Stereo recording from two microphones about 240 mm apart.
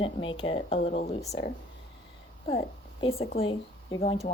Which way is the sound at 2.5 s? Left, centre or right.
Left.